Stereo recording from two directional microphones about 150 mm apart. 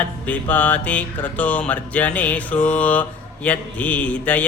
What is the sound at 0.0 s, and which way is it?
Music, 10° left (ahead or behind).